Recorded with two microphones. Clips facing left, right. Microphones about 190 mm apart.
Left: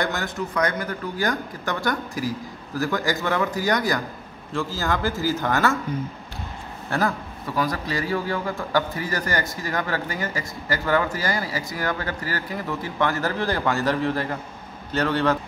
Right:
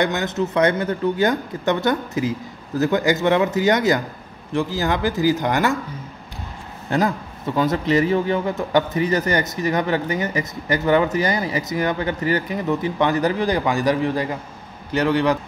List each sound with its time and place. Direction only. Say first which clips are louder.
0.0 s a man's voice: right 5 dB; 20° right (ahead or behind)
6.9 s a man's voice: right 4 dB; 20° right (ahead or behind)